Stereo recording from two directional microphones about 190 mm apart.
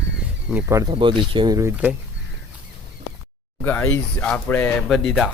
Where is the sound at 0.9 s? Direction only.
25° right (ahead or behind).